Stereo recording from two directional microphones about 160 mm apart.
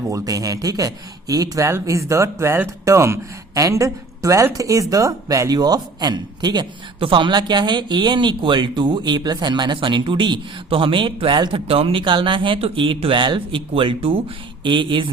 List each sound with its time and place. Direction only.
0.1 s speech: 20° right (ahead or behind)